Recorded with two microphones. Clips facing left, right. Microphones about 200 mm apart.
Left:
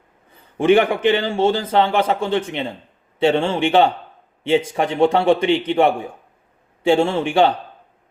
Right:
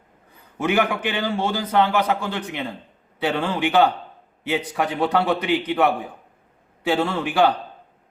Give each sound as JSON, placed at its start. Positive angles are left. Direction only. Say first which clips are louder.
{"t": 0.7, "sound": "a man's voice", "louder": "left 8 dB", "side_deg": 25}